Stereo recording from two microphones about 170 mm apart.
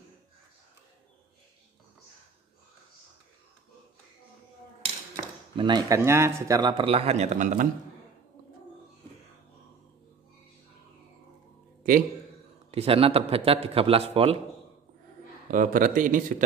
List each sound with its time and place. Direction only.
5.6 s a man's voice: 25° right (ahead or behind)
6.8 s a man's voice: 35° right (ahead or behind)
12.7 s a man's voice: 35° right (ahead or behind)
15.5 s speech: 50° right (ahead or behind)